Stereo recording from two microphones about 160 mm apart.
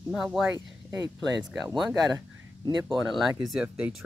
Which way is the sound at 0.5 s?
20° right (ahead or behind).